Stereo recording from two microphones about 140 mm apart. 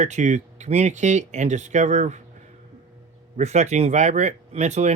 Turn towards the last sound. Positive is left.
turn(degrees=-55)  # may be behind; listen again after turning